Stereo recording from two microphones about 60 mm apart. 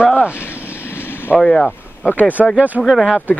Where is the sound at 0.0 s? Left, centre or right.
Right.